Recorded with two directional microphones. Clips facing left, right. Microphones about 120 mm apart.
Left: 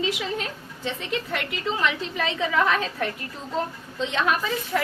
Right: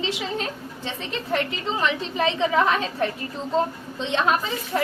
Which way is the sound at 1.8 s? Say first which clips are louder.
Right 5 dB; 30° right (ahead or behind).